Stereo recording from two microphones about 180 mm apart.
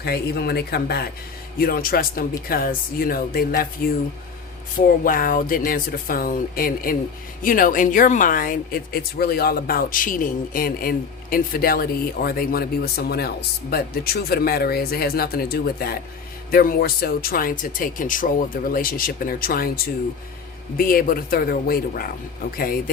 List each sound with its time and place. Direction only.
0.0 s a woman's voice: 60° left (ahead or behind)
5.0 s a woman's voice: 50° left (ahead or behind)